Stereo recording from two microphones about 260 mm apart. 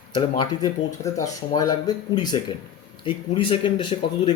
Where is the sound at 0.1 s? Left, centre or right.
Centre.